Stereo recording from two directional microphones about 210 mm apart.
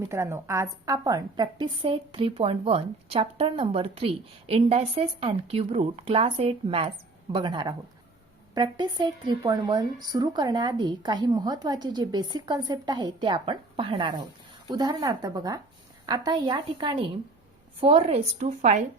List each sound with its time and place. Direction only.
0.0 s a woman's voice: 10° right (ahead or behind); by 18.8 s 35° right (ahead or behind)